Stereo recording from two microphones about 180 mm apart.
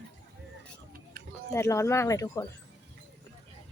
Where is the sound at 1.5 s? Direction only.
15° left (ahead or behind).